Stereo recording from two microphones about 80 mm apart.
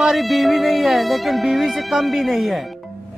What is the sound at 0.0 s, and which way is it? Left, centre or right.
Speech, centre.